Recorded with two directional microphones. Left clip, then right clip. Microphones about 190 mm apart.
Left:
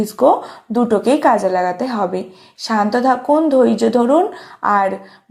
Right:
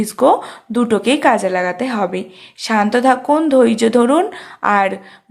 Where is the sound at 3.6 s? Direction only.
20° right (ahead or behind).